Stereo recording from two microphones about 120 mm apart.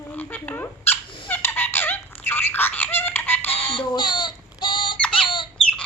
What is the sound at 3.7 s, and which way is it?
Alarm clock, 40° left (ahead or behind).